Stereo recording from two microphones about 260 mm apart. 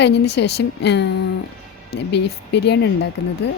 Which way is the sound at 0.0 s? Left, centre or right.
Left.